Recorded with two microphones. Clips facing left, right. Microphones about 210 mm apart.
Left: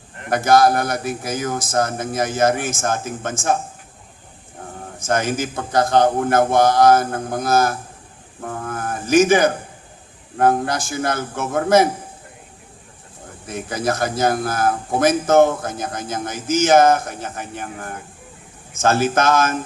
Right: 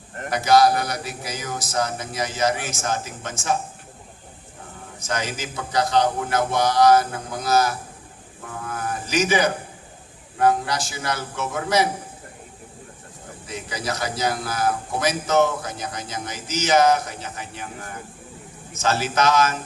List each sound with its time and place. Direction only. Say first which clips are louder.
0.3 s a man's voice: left 2 dB; 50° left (ahead or behind)
4.9 s a man's voice: left 7 dB; 50° left (ahead or behind)
8.4 s music: left 4 dB; 50° left (ahead or behind)
10.3 s a man's voice: left 3 dB; 50° left (ahead or behind)
13.5 s a man's voice: left 7 dB; 50° left (ahead or behind)